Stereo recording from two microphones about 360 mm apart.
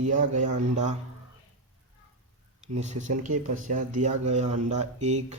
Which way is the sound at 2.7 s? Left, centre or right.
Centre.